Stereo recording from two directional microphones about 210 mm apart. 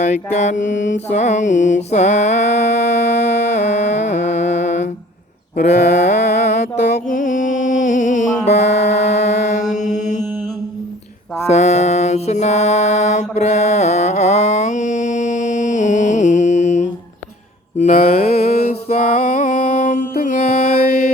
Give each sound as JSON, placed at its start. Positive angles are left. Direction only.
{"t": 0.0, "sound": "mantra", "side_deg": 35}
{"t": 6.9, "sound": "music", "side_deg": 40}
{"t": 11.4, "sound": "mantra", "side_deg": 30}
{"t": 18.7, "sound": "music", "side_deg": 35}